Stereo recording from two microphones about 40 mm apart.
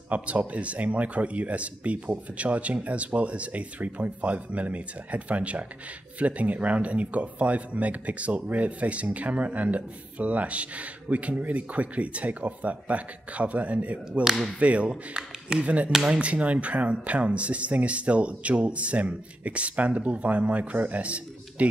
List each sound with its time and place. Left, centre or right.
0.1 s speech: right